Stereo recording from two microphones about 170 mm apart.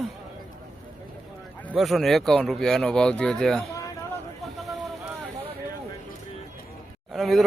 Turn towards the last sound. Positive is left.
turn(degrees=0)  # may be behind; listen again after turning